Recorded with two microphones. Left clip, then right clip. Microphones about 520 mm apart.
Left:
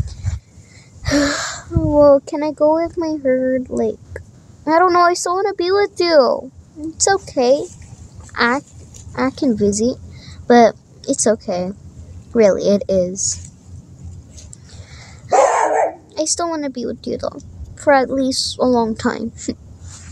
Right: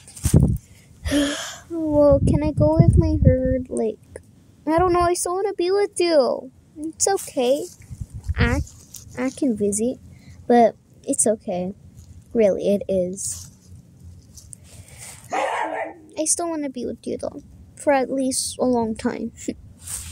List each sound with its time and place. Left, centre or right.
1.0 s a child's voice: right
16.2 s a woman's voice: right